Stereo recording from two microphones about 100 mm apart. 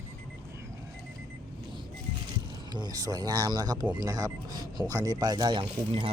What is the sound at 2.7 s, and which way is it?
Speech, 40° right (ahead or behind).